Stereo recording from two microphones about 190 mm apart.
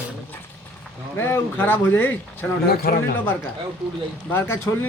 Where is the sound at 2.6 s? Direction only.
55° left (ahead or behind).